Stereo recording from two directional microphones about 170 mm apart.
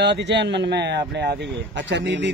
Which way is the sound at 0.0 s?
90° right.